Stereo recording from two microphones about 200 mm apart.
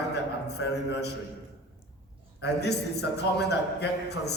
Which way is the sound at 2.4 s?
55° left (ahead or behind).